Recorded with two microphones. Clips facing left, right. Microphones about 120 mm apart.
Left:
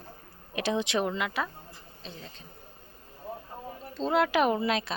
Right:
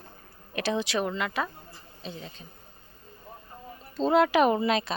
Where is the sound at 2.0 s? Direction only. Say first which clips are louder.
Right 5 dB; 5° right (ahead or behind).